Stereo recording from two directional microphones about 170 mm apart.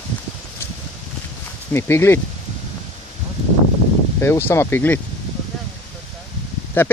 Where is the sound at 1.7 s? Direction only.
15° left (ahead or behind).